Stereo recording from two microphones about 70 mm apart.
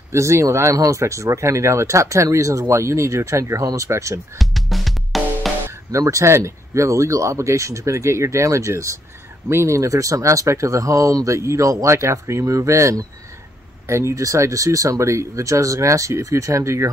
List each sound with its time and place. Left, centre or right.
0.1 s speech: right
4.4 s music: centre
5.9 s speech: right